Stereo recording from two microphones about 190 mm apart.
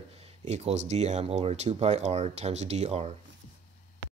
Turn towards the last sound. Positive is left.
turn(degrees=-35)  # may be behind; listen again after turning